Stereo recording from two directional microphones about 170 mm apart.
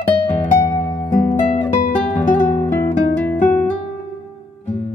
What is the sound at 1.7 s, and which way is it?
Guitar, 55° left (ahead or behind).